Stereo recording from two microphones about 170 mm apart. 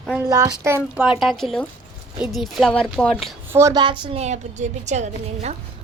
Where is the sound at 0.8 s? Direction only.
5° right (ahead or behind).